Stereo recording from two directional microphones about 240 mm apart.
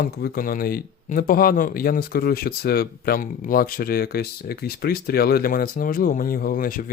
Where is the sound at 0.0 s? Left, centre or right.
Left.